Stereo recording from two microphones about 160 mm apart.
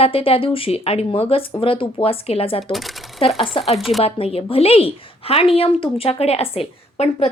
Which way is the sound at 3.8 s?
Centre (ahead or behind).